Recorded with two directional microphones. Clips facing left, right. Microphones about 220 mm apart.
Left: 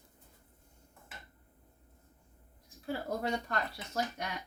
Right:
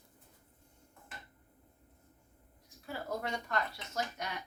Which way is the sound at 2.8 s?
35° left (ahead or behind).